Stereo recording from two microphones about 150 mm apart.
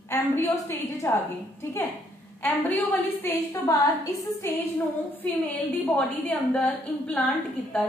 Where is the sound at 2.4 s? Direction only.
15° left (ahead or behind).